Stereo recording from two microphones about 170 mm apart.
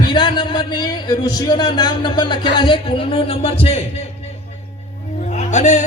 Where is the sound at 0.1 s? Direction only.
25° left (ahead or behind).